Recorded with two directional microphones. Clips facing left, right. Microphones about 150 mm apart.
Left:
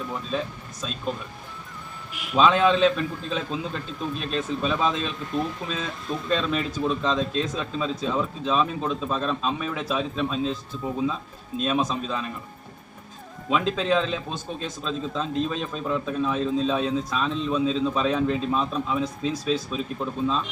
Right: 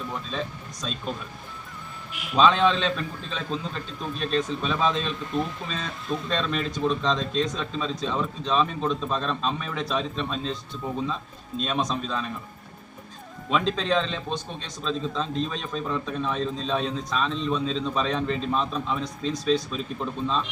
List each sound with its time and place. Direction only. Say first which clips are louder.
0.1 s a man's voice: left 2 dB; 5° left (ahead or behind)
2.3 s a man's voice: left 1 dB; 5° left (ahead or behind)
13.5 s a man's voice: left 1 dB; 5° left (ahead or behind)